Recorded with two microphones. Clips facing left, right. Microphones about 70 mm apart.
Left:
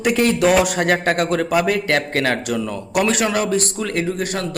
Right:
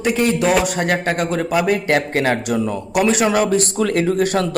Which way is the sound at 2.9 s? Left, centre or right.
Centre.